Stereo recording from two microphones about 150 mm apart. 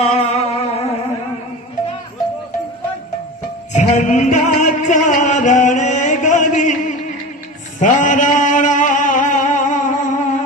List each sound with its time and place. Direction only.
0.0 s music: 45° left (ahead or behind)
3.7 s music: 50° left (ahead or behind)
7.8 s mantra: 55° left (ahead or behind)